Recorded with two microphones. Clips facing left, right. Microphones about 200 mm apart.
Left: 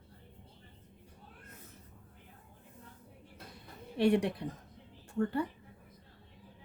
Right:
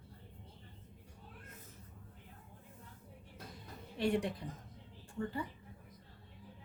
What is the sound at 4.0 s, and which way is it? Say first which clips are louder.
Speech: left 6 dB; 70° left (ahead or behind).